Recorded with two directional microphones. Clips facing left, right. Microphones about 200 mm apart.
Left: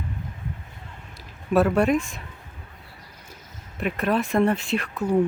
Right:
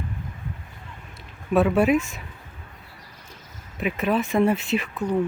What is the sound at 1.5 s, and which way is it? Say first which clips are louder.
Speech: right 1 dB; centre (ahead or behind).